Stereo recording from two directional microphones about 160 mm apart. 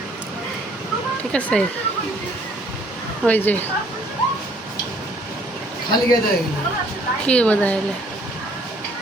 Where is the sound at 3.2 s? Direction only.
10° left (ahead or behind).